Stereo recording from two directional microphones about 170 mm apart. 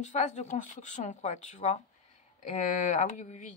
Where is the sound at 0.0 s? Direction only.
45° left (ahead or behind).